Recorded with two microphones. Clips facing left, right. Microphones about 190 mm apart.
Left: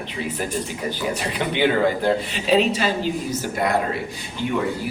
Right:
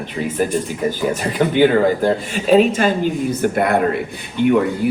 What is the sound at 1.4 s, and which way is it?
Speech, 45° right (ahead or behind).